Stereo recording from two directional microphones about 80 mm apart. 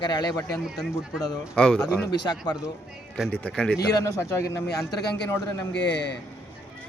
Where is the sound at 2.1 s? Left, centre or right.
Left.